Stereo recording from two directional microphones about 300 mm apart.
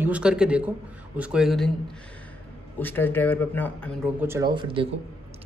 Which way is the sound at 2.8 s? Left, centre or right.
Centre.